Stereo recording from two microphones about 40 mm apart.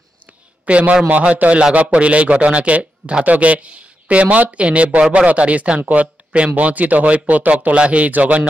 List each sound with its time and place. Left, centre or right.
0.7 s speech: right
3.3 s speech: right
5.8 s speech: right
6.3 s speech: right